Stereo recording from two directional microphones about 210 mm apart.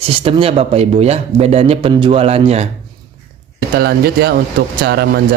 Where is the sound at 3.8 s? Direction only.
50° right (ahead or behind).